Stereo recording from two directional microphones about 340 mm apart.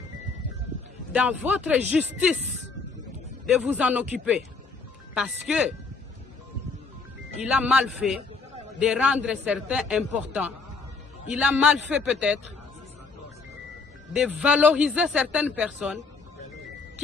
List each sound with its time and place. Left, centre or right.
1.1 s speech: centre
3.4 s speech: centre
7.3 s speech: centre
14.1 s speech: centre